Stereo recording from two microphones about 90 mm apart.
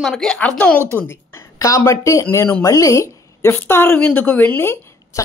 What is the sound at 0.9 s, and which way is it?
Speech, 25° left (ahead or behind).